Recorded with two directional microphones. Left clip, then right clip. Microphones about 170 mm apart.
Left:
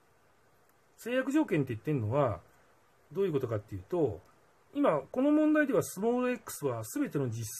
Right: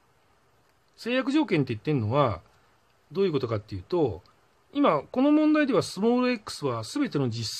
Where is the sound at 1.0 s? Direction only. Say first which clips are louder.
Right 4 dB; 30° right (ahead or behind).